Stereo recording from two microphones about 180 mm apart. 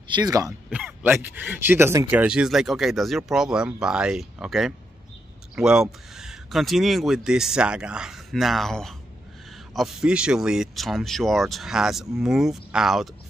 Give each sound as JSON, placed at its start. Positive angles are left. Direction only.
{"t": 0.1, "sound": "speech", "side_deg": -20}
{"t": 0.7, "sound": "speech", "side_deg": -5}